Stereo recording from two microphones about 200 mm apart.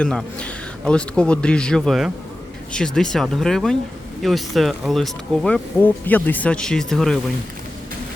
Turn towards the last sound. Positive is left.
turn(degrees=0)  # may be behind; listen again after turning